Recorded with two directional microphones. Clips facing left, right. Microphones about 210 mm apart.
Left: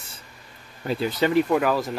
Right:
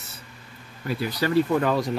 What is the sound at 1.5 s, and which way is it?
Speech, 5° left (ahead or behind).